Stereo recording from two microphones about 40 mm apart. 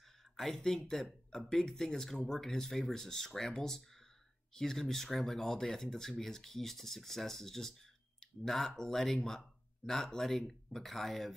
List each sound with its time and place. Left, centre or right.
0.4 s speech: centre